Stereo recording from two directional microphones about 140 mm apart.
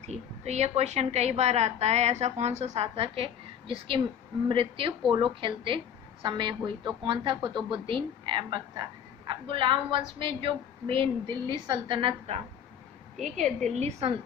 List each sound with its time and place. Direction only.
0.0 s a woman's voice: 50° right (ahead or behind)
13.4 s a woman's voice: 5° left (ahead or behind)
13.7 s a woman's voice: 50° right (ahead or behind)